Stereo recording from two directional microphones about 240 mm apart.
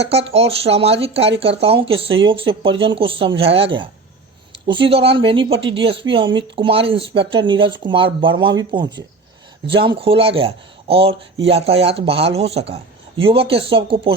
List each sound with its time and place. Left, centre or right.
0.1 s speech: right